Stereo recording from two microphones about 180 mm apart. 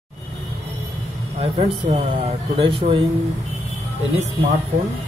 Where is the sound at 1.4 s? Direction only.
40° right (ahead or behind).